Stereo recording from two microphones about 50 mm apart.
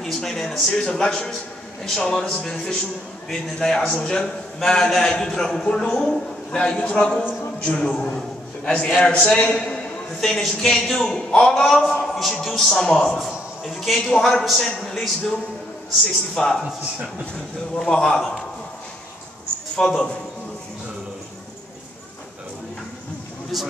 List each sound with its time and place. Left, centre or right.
0.0 s a man's voice: centre
10.2 s a man's voice: centre
13.2 s a man's voice: centre
17.7 s a man's voice: centre
19.8 s a man's voice: centre
23.5 s a man's voice: centre